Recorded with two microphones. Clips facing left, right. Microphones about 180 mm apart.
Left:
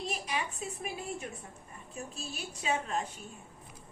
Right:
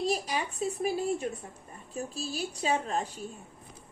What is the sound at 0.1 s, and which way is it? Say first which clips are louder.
A woman's voice: right 5 dB; 35° right (ahead or behind).